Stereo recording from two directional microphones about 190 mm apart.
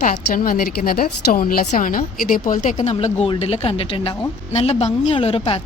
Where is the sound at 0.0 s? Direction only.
45° left (ahead or behind).